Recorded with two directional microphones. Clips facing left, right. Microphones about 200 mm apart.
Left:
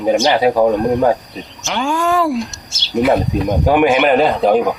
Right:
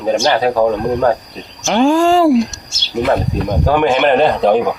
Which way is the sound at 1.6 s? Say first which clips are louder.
Right 7 dB; 40° right (ahead or behind).